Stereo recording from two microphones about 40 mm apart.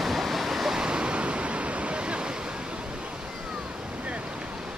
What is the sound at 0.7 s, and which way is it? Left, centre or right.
Waves, right.